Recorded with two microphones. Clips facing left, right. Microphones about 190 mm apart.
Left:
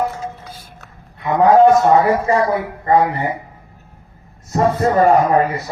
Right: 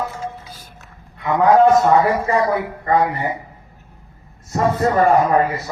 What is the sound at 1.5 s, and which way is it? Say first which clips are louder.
Speech: left 2 dB; 30° left (ahead or behind).